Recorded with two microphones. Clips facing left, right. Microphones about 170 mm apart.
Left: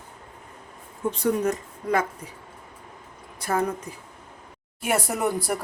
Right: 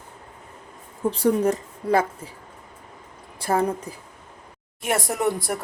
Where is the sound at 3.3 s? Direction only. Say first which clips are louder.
Right 3 dB; 30° right (ahead or behind).